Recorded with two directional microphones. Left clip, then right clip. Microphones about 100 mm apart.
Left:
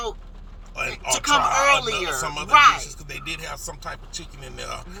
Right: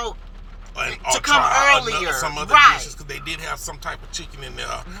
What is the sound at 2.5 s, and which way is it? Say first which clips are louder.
Speech: right 2 dB; 15° right (ahead or behind).